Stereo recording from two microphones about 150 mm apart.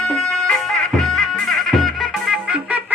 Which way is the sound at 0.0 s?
5° left (ahead or behind).